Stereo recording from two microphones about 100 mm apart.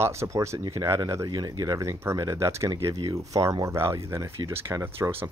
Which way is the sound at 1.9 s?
30° right (ahead or behind).